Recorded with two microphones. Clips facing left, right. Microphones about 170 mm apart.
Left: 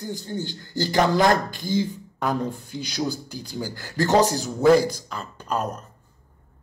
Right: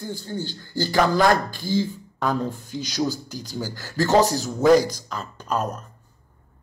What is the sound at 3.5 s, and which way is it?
Speech, 15° left (ahead or behind).